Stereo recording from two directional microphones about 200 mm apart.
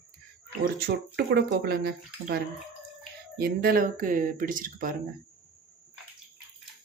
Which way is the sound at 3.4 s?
50° right (ahead or behind).